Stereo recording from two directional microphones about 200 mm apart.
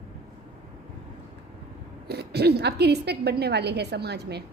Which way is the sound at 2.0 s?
55° right (ahead or behind).